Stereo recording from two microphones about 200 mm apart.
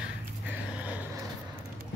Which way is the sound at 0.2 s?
10° right (ahead or behind).